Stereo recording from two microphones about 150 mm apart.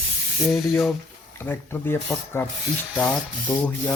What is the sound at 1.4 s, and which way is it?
Speech, 15° left (ahead or behind).